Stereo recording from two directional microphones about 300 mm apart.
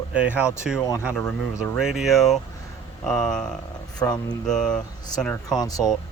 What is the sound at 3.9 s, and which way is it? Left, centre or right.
Speech, centre.